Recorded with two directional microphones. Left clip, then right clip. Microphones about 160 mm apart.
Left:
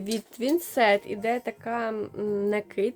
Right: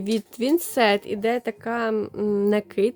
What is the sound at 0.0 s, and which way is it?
A woman's voice, 40° right (ahead or behind).